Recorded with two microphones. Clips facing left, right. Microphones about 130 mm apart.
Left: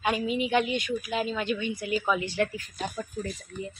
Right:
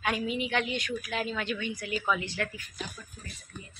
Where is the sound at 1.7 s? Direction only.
25° left (ahead or behind).